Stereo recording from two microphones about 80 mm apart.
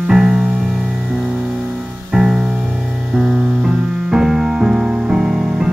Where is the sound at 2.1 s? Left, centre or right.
Centre.